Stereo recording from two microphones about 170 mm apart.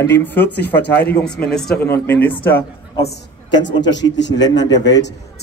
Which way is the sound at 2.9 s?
30° left (ahead or behind).